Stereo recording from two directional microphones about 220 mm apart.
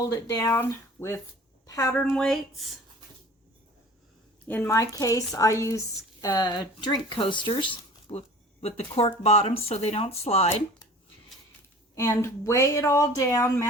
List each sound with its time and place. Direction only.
0.0 s a woman's voice: 15° left (ahead or behind)
2.0 s speech: centre (ahead or behind)
4.4 s speech: 10° left (ahead or behind); by 10.8 s 25° left (ahead or behind)
11.9 s speech: 15° left (ahead or behind)